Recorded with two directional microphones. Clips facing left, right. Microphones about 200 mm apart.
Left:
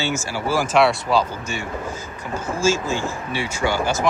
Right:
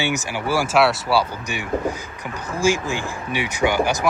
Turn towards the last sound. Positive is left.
turn(degrees=-15)  # may be behind; listen again after turning